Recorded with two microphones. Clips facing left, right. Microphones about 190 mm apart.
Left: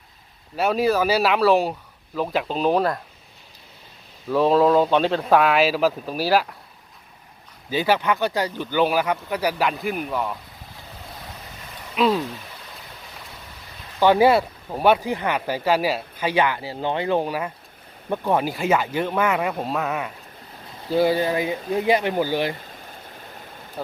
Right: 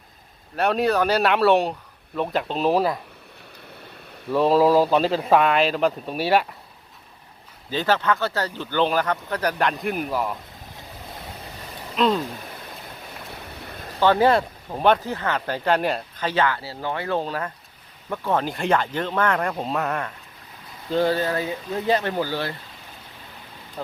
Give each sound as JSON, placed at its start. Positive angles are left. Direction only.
{"t": 0.5, "sound": "speech", "side_deg": 0}
{"t": 4.3, "sound": "speech", "side_deg": 0}
{"t": 7.7, "sound": "speech", "side_deg": 10}
{"t": 11.9, "sound": "speech", "side_deg": 5}
{"t": 13.6, "sound": "a sound", "side_deg": -50}
{"t": 14.0, "sound": "speech", "side_deg": 10}
{"t": 23.8, "sound": "speech", "side_deg": 5}